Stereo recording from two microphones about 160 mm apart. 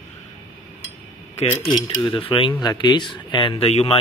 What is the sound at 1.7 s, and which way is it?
Speech, 30° left (ahead or behind).